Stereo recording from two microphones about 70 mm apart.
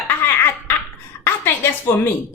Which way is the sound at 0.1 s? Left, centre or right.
Left.